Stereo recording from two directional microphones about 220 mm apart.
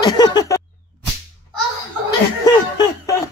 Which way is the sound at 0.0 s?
20° left (ahead or behind).